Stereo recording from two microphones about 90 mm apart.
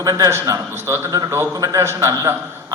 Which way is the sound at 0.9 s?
30° right (ahead or behind).